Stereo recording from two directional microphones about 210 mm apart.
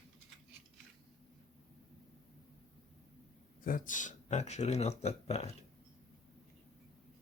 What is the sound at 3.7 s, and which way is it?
Speech, 40° left (ahead or behind).